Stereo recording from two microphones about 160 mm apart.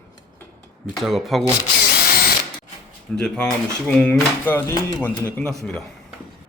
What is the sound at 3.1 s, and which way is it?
Speech, 5° left (ahead or behind).